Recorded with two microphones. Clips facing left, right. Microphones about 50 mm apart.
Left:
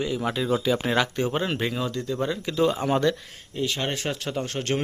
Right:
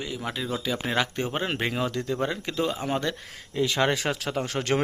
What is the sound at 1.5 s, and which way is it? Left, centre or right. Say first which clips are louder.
Speech: even; right.